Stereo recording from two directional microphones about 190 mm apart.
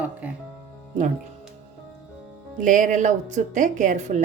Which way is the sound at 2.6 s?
40° right (ahead or behind).